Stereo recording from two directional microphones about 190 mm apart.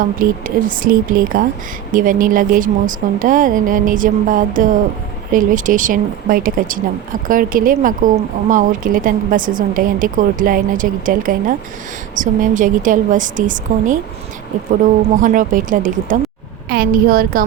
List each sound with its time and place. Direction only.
0.0 s speech: 45° right (ahead or behind)